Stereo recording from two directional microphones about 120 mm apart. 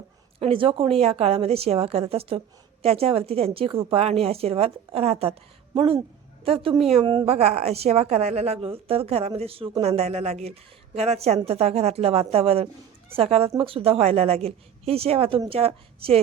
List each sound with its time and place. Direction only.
0.3 s a woman's voice: 50° right (ahead or behind)
7.0 s speech: 40° right (ahead or behind)
7.3 s a woman's voice: 60° right (ahead or behind)